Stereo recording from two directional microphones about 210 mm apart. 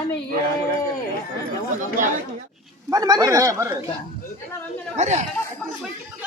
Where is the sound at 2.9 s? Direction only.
20° right (ahead or behind).